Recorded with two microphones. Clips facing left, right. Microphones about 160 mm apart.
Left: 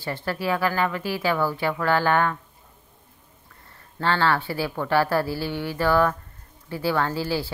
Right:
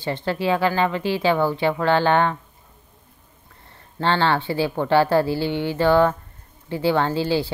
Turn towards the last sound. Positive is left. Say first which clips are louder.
# right 4 dB
turn(degrees=-25)  # may be behind; listen again after turning